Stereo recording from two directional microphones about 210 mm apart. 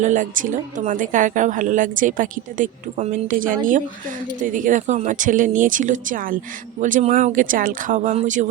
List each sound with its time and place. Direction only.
0.0 s a woman's voice: 35° right (ahead or behind)